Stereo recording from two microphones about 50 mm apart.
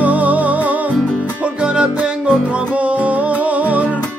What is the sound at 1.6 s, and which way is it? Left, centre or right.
Music, right.